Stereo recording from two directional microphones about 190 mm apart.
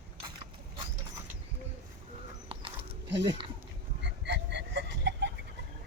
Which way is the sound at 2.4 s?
30° right (ahead or behind).